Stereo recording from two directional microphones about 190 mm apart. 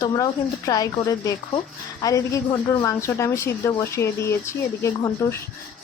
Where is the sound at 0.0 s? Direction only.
20° left (ahead or behind).